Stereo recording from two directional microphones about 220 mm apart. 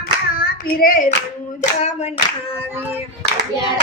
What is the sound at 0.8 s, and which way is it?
Clapping, 40° left (ahead or behind).